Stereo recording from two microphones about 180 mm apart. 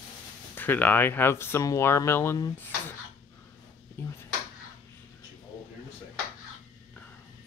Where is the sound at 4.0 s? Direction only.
10° left (ahead or behind).